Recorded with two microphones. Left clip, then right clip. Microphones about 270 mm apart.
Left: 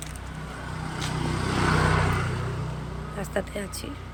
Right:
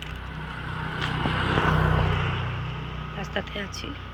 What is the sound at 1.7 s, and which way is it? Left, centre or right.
Vehicle, right.